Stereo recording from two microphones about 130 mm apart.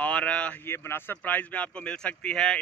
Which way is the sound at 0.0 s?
10° left (ahead or behind).